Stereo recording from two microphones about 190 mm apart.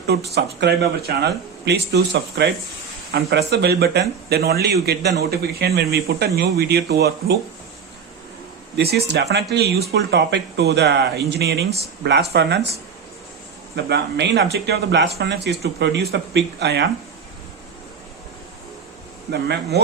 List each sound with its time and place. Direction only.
0.1 s speech: 60° right (ahead or behind)
8.7 s speech: 60° right (ahead or behind)
19.3 s speech: 60° right (ahead or behind)